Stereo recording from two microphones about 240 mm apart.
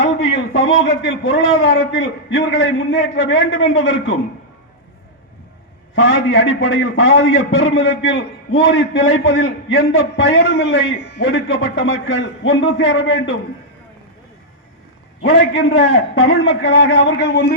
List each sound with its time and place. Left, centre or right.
0.2 s a man's voice: left
5.9 s a man's voice: left
15.2 s a man's voice: left